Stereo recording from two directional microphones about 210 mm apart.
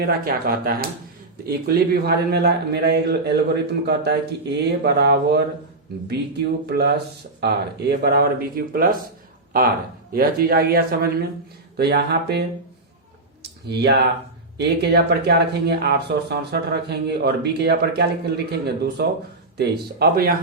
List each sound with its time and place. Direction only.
0.0 s speech: 45° right (ahead or behind)
6.7 s speech: 50° right (ahead or behind)
10.1 s speech: 45° right (ahead or behind)
13.4 s clicking: 50° right (ahead or behind)
14.6 s speech: 50° right (ahead or behind)